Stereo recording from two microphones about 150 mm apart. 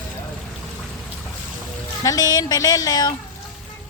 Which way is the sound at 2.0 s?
25° left (ahead or behind).